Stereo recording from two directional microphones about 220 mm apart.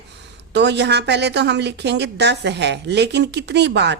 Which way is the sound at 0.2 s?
50° right (ahead or behind).